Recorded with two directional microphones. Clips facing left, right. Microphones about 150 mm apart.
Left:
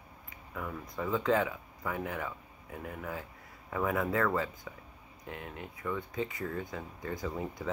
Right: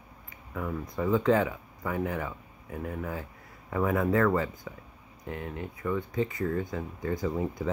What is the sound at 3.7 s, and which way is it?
Speech, 15° right (ahead or behind).